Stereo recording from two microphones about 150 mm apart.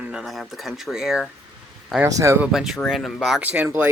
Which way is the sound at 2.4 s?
5° right (ahead or behind).